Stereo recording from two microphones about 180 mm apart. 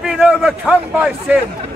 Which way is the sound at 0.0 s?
5° right (ahead or behind).